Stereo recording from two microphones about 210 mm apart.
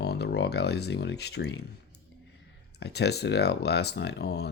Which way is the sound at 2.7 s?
50° left (ahead or behind).